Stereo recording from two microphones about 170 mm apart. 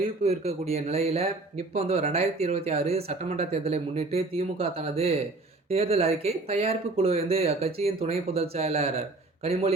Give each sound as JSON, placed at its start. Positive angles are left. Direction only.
{"t": 0.3, "sound": "speech", "side_deg": -40}